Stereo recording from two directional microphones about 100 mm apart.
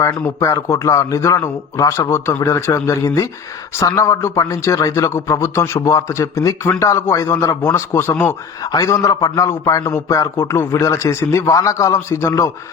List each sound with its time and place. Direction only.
0.3 s a man's voice: 30° left (ahead or behind)